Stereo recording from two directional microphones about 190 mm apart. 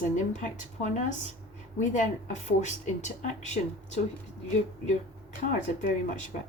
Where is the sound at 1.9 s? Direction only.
40° left (ahead or behind).